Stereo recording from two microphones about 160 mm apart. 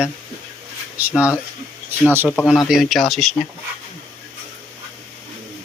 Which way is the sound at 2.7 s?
Centre (ahead or behind).